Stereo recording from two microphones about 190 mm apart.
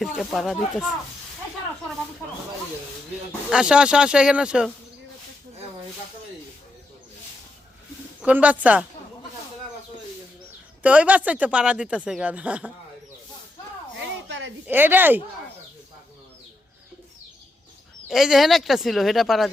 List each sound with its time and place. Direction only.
0.0 s speech: centre (ahead or behind)
3.5 s speech: 5° right (ahead or behind)
8.2 s speech: 5° right (ahead or behind)
10.8 s speech: 5° right (ahead or behind)
14.3 s a sound: 70° right (ahead or behind)
14.7 s speech: 10° right (ahead or behind)
18.1 s speech: centre (ahead or behind)